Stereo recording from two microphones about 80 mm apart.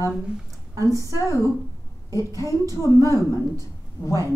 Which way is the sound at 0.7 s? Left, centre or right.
Right.